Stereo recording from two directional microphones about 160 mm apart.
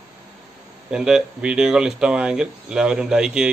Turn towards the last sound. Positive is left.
turn(degrees=-5)  # may be behind; listen again after turning